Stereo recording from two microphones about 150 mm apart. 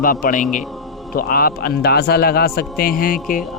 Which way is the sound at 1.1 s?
75° left (ahead or behind).